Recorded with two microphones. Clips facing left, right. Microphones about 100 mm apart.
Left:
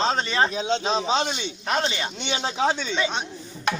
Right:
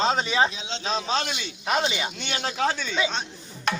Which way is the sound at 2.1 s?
25° left (ahead or behind).